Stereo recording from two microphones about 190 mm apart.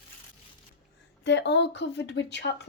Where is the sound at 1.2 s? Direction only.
70° left (ahead or behind).